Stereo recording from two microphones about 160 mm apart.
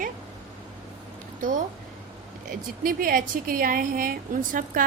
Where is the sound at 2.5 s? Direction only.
60° right (ahead or behind).